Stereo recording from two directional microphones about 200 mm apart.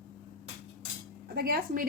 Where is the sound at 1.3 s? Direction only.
50° right (ahead or behind).